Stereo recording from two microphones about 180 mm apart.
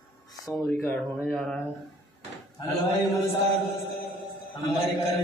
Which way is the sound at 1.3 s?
5° left (ahead or behind).